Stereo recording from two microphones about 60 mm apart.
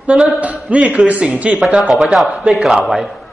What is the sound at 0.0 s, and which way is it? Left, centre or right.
A man's voice, right.